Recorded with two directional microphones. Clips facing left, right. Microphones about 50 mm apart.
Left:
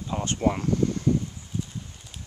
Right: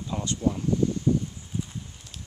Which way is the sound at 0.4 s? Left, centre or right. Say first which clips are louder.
Left 1 dB; left.